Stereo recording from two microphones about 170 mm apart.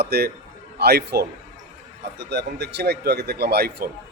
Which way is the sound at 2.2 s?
90° right.